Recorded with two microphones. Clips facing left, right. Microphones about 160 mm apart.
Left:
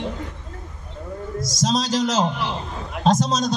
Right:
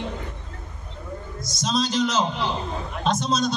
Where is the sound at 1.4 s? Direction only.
90° left.